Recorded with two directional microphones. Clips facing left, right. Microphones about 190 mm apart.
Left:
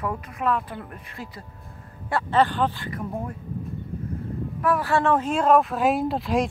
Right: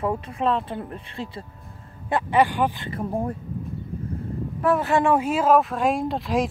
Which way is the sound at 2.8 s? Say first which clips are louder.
Right 4 dB; 30° right (ahead or behind).